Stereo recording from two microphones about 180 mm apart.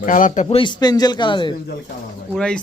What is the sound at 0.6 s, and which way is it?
Speech, 25° left (ahead or behind).